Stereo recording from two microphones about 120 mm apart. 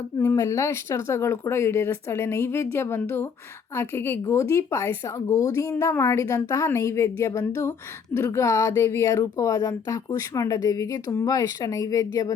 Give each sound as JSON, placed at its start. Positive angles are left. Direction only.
{"t": 0.2, "sound": "speech", "side_deg": 25}